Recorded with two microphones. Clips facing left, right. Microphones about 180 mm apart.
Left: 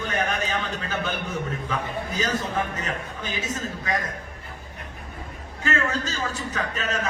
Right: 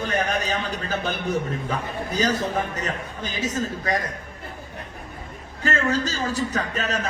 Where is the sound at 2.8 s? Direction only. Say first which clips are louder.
Right 2 dB; 40° right (ahead or behind).